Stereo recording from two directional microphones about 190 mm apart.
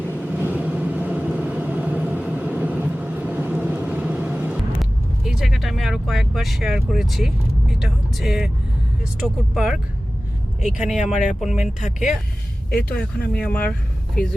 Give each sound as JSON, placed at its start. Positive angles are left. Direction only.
{"t": 0.3, "sound": "vehicle", "side_deg": -10}
{"t": 9.2, "sound": "speech", "side_deg": 0}
{"t": 10.9, "sound": "speech", "side_deg": 40}
{"t": 12.9, "sound": "speech", "side_deg": 5}